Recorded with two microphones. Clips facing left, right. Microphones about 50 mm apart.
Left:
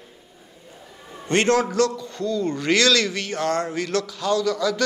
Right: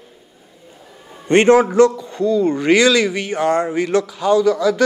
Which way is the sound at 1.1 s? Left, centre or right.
Right.